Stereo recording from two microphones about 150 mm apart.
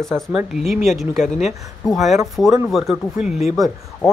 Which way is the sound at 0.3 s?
5° right (ahead or behind).